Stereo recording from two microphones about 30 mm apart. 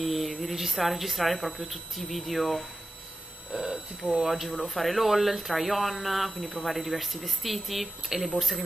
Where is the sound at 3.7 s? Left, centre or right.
Right.